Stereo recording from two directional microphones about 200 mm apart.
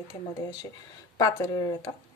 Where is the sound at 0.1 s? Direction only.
20° left (ahead or behind).